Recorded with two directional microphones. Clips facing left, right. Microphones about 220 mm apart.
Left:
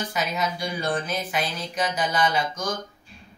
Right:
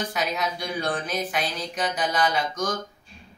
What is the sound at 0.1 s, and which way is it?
Speech, centre (ahead or behind).